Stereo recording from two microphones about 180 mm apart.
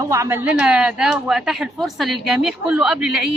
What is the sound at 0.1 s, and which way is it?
A woman's voice, 15° right (ahead or behind).